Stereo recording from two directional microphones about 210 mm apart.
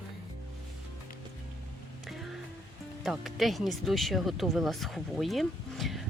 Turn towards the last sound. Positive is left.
turn(degrees=0)  # may be behind; listen again after turning